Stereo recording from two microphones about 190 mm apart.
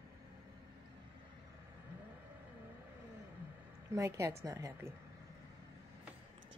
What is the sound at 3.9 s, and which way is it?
A woman's voice, 15° right (ahead or behind).